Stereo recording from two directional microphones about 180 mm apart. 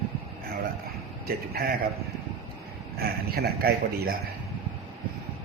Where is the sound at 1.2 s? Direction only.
60° right (ahead or behind).